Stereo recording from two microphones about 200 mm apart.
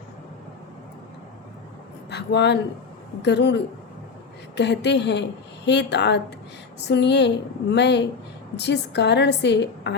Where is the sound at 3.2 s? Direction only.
60° left (ahead or behind).